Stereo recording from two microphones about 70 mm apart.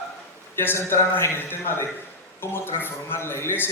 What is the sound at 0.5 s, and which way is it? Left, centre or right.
A man's voice, left.